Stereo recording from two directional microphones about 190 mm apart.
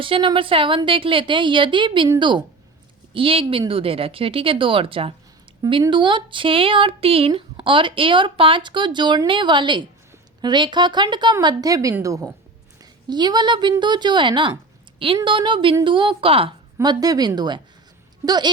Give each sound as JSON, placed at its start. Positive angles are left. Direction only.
{"t": 0.0, "sound": "speech", "side_deg": -25}